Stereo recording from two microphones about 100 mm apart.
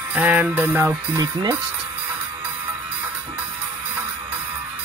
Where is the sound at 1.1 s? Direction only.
40° right (ahead or behind).